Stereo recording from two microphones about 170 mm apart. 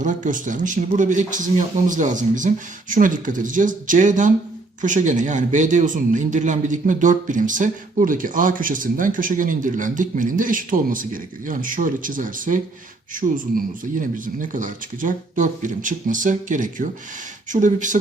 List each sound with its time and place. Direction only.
0.0 s a man's voice: 50° right (ahead or behind)
13.9 s a man's voice: 50° right (ahead or behind)